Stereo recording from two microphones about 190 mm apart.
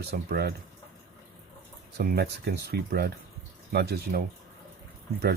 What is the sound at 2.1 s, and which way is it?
Speech, 55° right (ahead or behind).